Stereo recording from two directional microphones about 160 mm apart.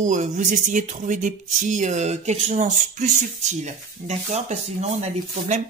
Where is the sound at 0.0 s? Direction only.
50° right (ahead or behind).